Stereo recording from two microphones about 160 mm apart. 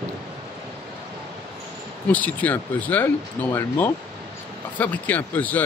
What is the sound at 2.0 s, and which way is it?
Speech, 10° left (ahead or behind).